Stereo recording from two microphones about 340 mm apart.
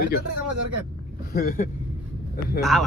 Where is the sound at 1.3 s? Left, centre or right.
Left.